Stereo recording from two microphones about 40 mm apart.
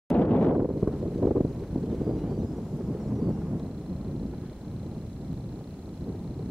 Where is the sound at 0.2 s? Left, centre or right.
Left.